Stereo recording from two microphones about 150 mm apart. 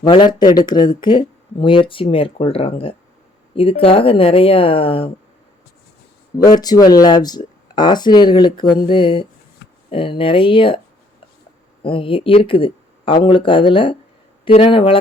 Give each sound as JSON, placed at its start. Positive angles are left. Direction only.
{"t": 0.0, "sound": "speech", "side_deg": 30}
{"t": 6.4, "sound": "speech", "side_deg": 25}
{"t": 11.8, "sound": "speech", "side_deg": 35}